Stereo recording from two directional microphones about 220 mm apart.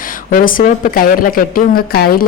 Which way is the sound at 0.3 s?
40° left (ahead or behind).